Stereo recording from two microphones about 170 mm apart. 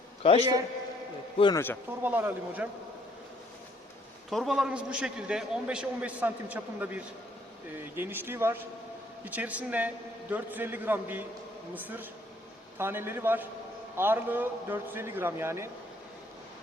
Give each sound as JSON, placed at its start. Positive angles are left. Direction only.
{"t": 0.2, "sound": "a man's voice", "side_deg": 35}
{"t": 1.5, "sound": "speech", "side_deg": 10}
{"t": 2.0, "sound": "a man's voice", "side_deg": -10}
{"t": 4.3, "sound": "a man's voice", "side_deg": 0}